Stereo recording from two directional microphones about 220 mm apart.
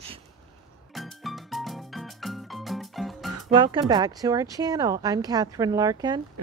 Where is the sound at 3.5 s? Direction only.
20° right (ahead or behind).